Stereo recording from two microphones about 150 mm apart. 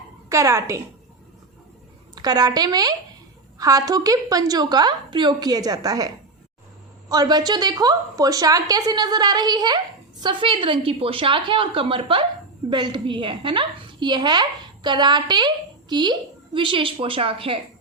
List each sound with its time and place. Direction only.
0.3 s a woman's voice: 20° right (ahead or behind)
2.1 s a woman's voice: 25° right (ahead or behind)